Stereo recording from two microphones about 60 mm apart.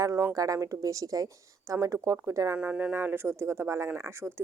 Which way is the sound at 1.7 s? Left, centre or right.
Right.